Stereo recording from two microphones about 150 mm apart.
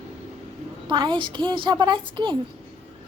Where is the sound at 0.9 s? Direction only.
30° right (ahead or behind).